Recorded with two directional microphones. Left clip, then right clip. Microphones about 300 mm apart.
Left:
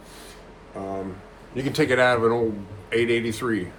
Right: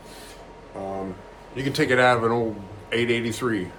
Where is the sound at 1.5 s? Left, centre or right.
Centre.